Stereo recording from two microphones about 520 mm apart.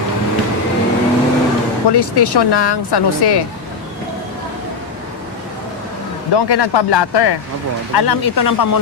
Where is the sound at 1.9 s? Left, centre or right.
Left.